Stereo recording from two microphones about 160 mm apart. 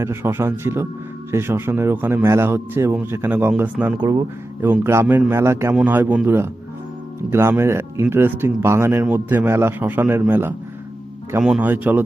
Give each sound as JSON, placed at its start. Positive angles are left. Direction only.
{"t": 0.0, "sound": "a man's voice", "side_deg": -15}
{"t": 4.0, "sound": "a man's voice", "side_deg": -20}